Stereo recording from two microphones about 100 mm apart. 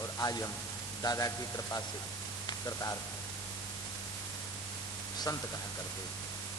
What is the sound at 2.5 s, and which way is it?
Speech, 35° left (ahead or behind).